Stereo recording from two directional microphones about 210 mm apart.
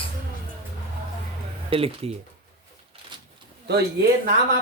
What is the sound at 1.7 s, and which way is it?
Speech, 25° right (ahead or behind).